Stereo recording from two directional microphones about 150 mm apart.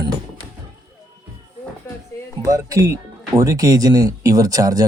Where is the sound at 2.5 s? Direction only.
20° right (ahead or behind).